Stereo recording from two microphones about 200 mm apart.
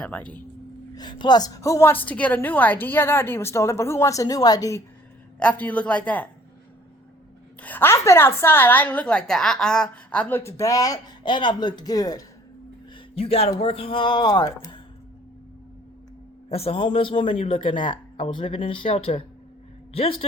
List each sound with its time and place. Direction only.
0.0 s speech: 5° left (ahead or behind)
0.9 s a woman's voice: 20° left (ahead or behind)
5.4 s a woman's voice: 5° left (ahead or behind)
7.6 s a woman's voice: 10° left (ahead or behind)
13.1 s speech: 30° left (ahead or behind)
16.5 s speech: 30° left (ahead or behind)